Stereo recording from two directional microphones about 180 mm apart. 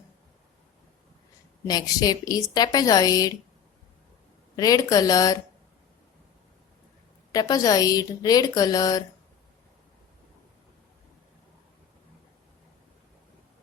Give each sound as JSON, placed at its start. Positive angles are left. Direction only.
{"t": 1.6, "sound": "a woman's voice", "side_deg": 20}
{"t": 4.5, "sound": "a woman's voice", "side_deg": 20}
{"t": 7.3, "sound": "a woman's voice", "side_deg": 20}